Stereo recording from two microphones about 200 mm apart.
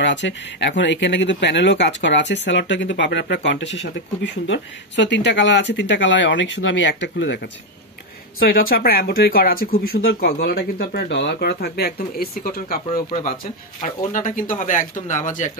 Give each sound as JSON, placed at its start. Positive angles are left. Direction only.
{"t": 0.0, "sound": "speech", "side_deg": 65}
{"t": 8.4, "sound": "speech", "side_deg": 45}